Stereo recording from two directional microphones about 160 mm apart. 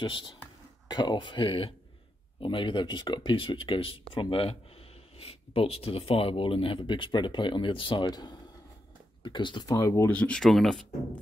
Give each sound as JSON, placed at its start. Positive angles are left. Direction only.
{"t": 0.0, "sound": "speech", "side_deg": 30}